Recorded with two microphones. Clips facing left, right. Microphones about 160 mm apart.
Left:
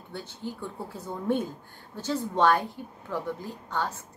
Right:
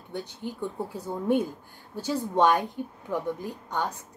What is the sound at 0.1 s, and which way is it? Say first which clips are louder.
A woman's voice: right 2 dB; 15° right (ahead or behind).